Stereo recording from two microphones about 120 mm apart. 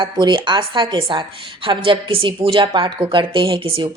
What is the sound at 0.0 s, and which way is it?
Speech, 40° right (ahead or behind).